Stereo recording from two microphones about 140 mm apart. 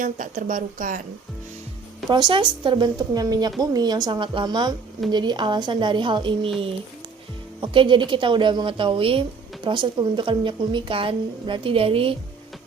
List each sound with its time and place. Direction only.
0.0 s speech: 65° right (ahead or behind)
2.0 s a woman's voice: 30° right (ahead or behind)
7.6 s a woman's voice: 35° right (ahead or behind)